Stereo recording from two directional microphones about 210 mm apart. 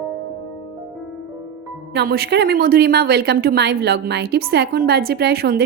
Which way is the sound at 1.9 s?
50° right (ahead or behind).